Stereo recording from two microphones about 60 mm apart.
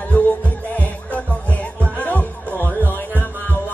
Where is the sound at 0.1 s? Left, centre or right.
Left.